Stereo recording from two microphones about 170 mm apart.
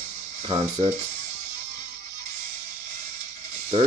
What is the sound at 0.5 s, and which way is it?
Speech, 40° right (ahead or behind).